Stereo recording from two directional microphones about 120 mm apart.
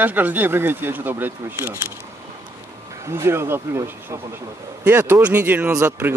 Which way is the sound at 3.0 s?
20° right (ahead or behind).